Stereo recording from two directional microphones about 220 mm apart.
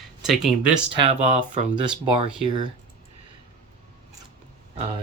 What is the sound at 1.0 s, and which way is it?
Speech, 30° right (ahead or behind).